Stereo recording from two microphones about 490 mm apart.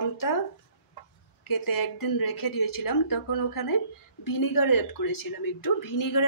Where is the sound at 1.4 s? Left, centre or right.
Left.